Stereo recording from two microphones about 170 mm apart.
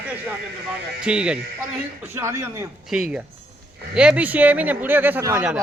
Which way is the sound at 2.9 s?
5° right (ahead or behind).